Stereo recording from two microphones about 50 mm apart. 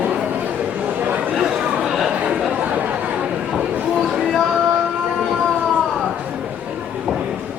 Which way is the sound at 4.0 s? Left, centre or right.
Centre.